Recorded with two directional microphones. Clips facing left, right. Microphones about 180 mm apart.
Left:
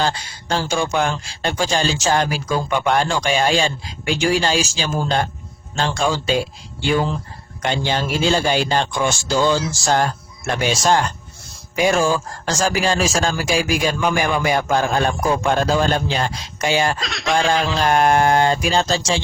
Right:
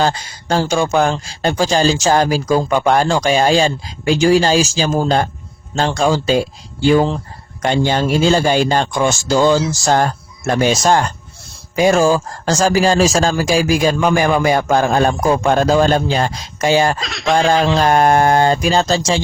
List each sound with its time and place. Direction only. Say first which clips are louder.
0.0 s speech: right 5 dB; 45° right (ahead or behind)
17.0 s speech: right 4 dB; centre (ahead or behind)
17.7 s speech: right 1 dB; 45° right (ahead or behind)